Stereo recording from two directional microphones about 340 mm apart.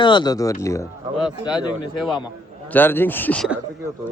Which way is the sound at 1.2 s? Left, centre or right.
Centre.